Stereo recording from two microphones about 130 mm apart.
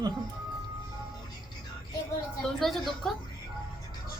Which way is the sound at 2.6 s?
Centre (ahead or behind).